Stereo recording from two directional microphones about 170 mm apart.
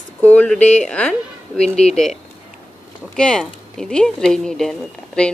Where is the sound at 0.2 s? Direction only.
10° left (ahead or behind).